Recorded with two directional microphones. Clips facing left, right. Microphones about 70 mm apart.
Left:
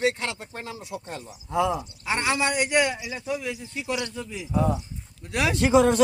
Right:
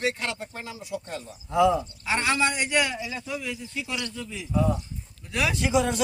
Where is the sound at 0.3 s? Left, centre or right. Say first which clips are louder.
Even; left.